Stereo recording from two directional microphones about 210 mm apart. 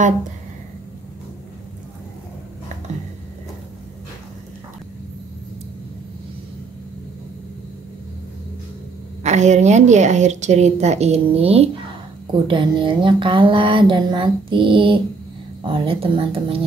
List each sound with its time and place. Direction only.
9.2 s a woman's voice: 35° right (ahead or behind)